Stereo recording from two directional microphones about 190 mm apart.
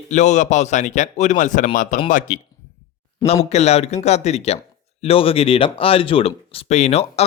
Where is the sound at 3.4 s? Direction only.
35° left (ahead or behind).